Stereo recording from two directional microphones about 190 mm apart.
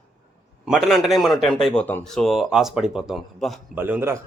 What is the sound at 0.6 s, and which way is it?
Speech, centre (ahead or behind).